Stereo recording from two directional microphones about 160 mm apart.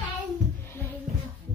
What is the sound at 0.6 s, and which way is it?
Music, 10° left (ahead or behind).